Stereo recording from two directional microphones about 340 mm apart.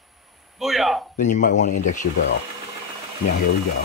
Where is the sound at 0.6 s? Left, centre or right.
Centre.